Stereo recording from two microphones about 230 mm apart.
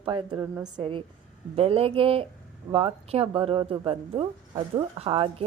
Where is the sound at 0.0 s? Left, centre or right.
Right.